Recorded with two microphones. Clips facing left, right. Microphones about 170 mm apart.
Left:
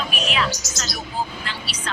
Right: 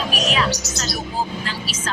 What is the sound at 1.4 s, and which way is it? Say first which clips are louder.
Speech: right 4 dB; 40° right (ahead or behind).